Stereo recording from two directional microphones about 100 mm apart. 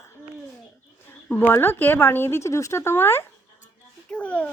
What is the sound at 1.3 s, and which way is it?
Speech, 20° left (ahead or behind).